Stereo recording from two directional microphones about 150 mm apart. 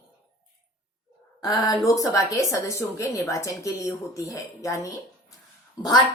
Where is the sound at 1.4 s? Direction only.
25° left (ahead or behind).